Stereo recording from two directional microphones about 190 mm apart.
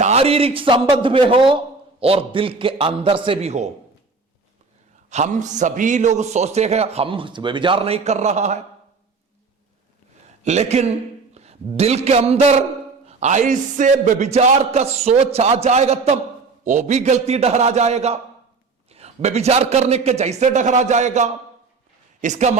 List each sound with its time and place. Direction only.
0.0 s a man's voice: 35° right (ahead or behind)
5.0 s a man's voice: 40° right (ahead or behind)
10.4 s a man's voice: 35° right (ahead or behind)